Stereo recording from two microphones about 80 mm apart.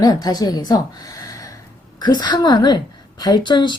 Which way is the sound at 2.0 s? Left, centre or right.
Left.